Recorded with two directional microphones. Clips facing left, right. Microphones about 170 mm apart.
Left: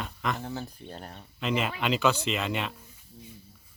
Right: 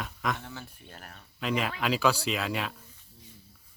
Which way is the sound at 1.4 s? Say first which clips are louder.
Left 1 dB; centre (ahead or behind).